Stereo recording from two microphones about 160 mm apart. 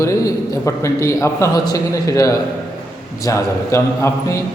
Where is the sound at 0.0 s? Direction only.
20° left (ahead or behind).